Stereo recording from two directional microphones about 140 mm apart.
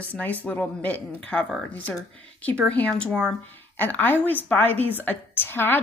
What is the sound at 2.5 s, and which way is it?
A woman's voice, 10° left (ahead or behind).